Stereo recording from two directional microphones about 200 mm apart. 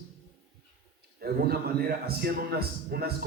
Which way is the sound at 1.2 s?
50° right (ahead or behind).